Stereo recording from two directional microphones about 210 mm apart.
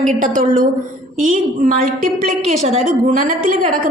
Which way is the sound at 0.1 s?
40° right (ahead or behind).